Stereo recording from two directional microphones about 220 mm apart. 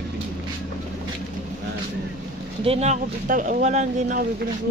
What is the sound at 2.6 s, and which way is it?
Speech, 30° right (ahead or behind).